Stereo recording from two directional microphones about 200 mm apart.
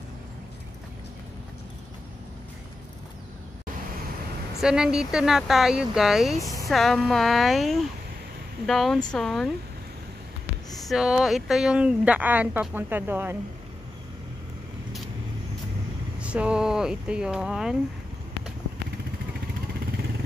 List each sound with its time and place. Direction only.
4.6 s speech: 5° right (ahead or behind)
10.9 s speech: 5° right (ahead or behind)
16.2 s speech: 5° right (ahead or behind)